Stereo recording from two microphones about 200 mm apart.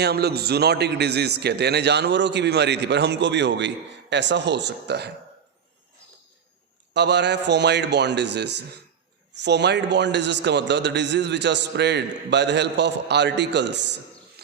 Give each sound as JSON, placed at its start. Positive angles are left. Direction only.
{"t": 0.0, "sound": "a man's voice", "side_deg": -55}
{"t": 6.9, "sound": "a man's voice", "side_deg": -60}
{"t": 14.4, "sound": "a sound", "side_deg": -55}